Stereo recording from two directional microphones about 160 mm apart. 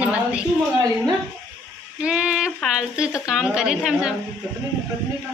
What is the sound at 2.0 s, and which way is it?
A woman's voice, 5° right (ahead or behind).